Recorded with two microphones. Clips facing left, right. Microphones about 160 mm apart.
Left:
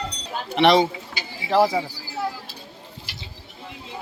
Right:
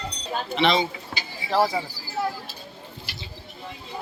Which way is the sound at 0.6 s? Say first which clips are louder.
Left 6 dB; 65° left (ahead or behind).